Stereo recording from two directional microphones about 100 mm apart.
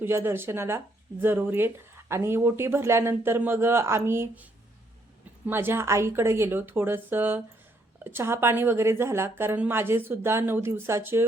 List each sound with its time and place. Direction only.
0.0 s speech: 25° right (ahead or behind)
5.5 s speech: 20° right (ahead or behind)